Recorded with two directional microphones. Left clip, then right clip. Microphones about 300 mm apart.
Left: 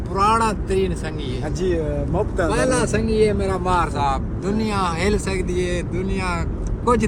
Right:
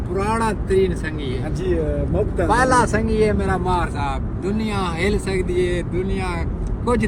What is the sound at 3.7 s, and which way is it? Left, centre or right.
Speech, left.